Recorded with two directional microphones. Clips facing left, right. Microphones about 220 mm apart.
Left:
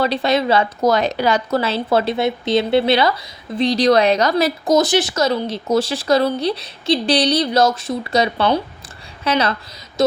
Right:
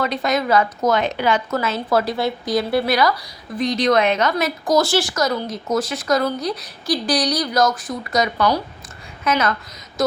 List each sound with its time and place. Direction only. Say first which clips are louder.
0.0 s a woman's voice: left 3 dB; 30° left (ahead or behind)
4.7 s speech: left 1 dB; 20° left (ahead or behind)